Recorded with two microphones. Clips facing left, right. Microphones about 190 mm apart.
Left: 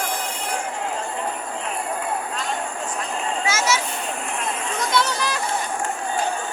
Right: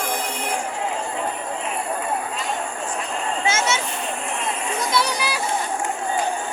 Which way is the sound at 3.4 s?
25° right (ahead or behind).